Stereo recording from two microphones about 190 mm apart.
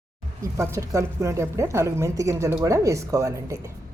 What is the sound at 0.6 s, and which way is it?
Speech, 15° right (ahead or behind).